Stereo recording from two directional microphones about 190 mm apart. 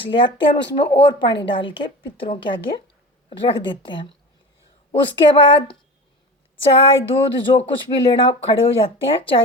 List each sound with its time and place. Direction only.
0.0 s speech: 25° left (ahead or behind)
6.6 s speech: 30° left (ahead or behind)